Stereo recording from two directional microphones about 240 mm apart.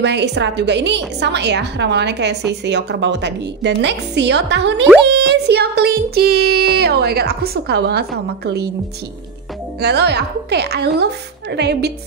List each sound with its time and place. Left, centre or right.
0.0 s a woman's voice: right
5.0 s a sound: right
9.8 s a woman's voice: right